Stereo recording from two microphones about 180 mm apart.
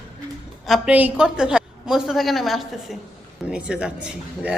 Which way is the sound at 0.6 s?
5° right (ahead or behind).